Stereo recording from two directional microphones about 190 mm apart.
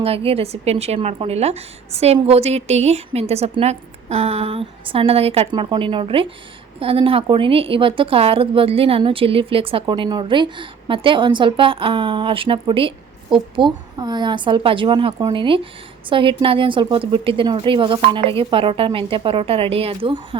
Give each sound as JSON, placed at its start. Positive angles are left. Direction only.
{"t": 0.0, "sound": "a woman's voice", "side_deg": -30}